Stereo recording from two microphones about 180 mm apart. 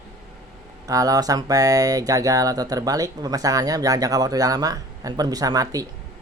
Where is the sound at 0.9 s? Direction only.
20° right (ahead or behind).